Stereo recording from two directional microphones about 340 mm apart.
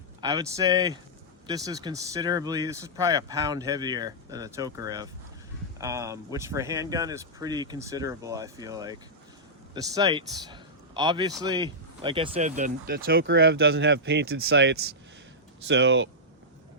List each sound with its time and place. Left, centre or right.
0.2 s speech: centre; by 16.0 s right